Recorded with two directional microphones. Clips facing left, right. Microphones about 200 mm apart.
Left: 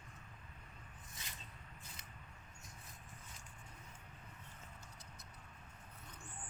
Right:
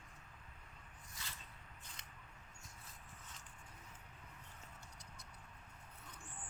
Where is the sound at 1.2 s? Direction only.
20° left (ahead or behind).